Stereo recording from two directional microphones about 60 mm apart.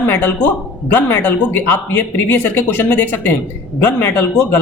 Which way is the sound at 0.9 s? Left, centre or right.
Left.